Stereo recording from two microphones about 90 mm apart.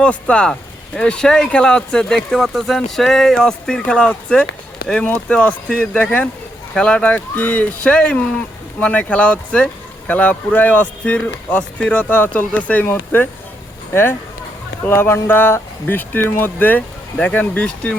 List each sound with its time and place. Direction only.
0.0 s speech: 10° left (ahead or behind)